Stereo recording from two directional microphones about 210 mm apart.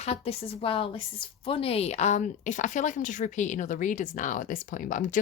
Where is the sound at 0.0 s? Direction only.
30° left (ahead or behind).